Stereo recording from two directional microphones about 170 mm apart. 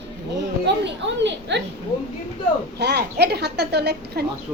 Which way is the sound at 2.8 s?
75° right (ahead or behind).